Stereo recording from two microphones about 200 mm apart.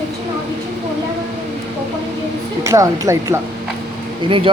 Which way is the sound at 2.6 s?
15° right (ahead or behind).